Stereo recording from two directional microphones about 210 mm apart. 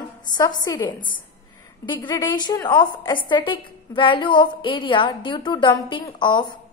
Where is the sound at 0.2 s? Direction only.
20° left (ahead or behind).